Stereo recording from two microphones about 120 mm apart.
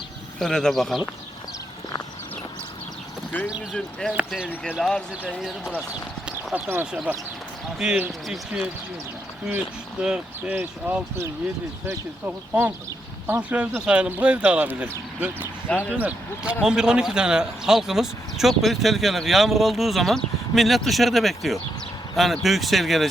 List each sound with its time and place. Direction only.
0.3 s a man's voice: 5° left (ahead or behind)
3.7 s a man's voice: 5° left (ahead or behind)
5.9 s clip-clop: 10° right (ahead or behind)
7.9 s speech: 10° right (ahead or behind)
10.0 s a man's voice: 10° right (ahead or behind)